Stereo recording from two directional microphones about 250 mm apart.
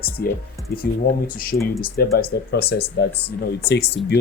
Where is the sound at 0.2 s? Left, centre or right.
Left.